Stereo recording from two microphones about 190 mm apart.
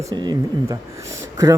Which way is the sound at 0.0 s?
20° right (ahead or behind).